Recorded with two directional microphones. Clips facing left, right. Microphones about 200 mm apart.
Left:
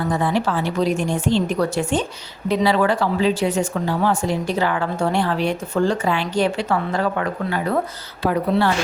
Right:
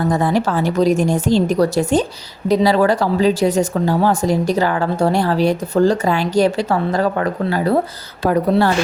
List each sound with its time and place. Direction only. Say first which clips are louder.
0.1 s a woman's voice: right 4 dB; 40° right (ahead or behind)